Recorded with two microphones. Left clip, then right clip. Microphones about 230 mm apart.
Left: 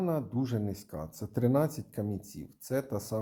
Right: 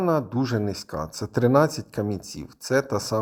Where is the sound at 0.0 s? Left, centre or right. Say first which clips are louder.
Right 9 dB; right.